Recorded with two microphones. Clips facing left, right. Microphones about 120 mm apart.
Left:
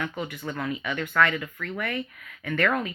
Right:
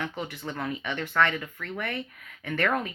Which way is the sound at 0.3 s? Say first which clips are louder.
Left 2 dB; 30° right (ahead or behind).